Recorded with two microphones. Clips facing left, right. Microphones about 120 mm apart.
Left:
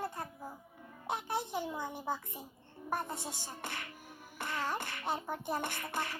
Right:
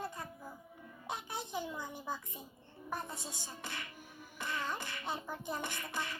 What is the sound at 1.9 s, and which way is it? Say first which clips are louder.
A woman's voice: left 4 dB; 20° left (ahead or behind).